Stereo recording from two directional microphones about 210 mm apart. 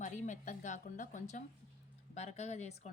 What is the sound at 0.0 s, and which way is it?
A woman's voice, 35° left (ahead or behind).